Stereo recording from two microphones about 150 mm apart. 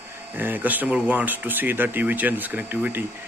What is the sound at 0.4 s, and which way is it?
Speech, 10° right (ahead or behind).